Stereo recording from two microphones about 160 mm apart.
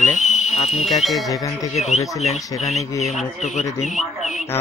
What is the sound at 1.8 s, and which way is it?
Speech, 45° left (ahead or behind).